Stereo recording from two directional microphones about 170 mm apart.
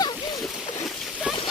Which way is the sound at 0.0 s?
25° left (ahead or behind).